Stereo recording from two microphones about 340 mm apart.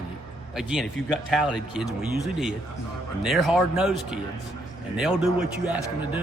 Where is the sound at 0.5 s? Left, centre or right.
Centre.